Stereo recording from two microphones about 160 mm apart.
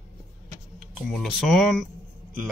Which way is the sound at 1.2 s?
Centre (ahead or behind).